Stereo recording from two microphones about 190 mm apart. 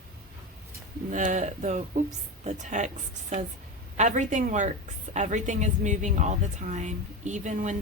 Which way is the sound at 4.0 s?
40° right (ahead or behind).